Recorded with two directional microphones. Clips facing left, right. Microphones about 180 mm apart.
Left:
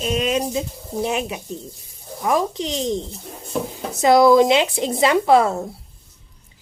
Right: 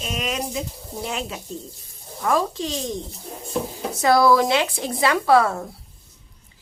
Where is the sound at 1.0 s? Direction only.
20° left (ahead or behind).